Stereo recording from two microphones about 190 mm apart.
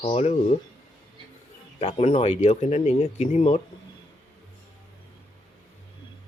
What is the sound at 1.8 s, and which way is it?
Speech, 30° left (ahead or behind).